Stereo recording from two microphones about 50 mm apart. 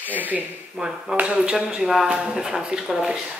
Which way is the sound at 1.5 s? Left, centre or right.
Centre.